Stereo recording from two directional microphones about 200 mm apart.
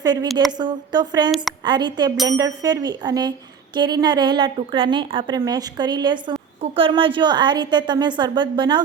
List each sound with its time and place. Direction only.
0.0 s a woman's voice: 20° right (ahead or behind)